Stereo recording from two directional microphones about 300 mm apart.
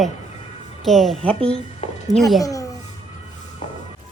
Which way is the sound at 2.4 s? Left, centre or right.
Centre.